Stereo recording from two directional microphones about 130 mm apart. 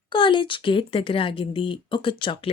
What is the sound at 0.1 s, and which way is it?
A woman's voice, 40° left (ahead or behind).